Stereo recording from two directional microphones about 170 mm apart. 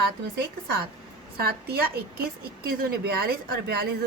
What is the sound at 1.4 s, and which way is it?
Speech, 65° right (ahead or behind).